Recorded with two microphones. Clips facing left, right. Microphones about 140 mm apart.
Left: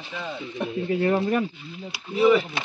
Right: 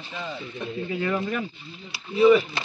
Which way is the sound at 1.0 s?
40° left (ahead or behind).